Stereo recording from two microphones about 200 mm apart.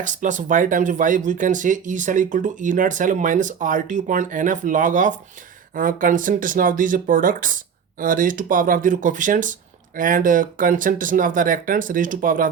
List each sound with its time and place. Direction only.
0.0 s speech: 40° right (ahead or behind)